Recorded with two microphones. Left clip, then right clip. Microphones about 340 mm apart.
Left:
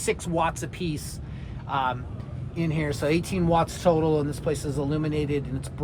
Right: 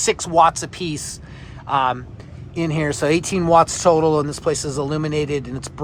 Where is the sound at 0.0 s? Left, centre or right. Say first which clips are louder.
Right 11 dB; right.